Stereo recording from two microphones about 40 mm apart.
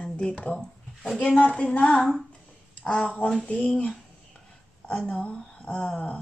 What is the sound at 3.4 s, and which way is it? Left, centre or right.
Speech, left.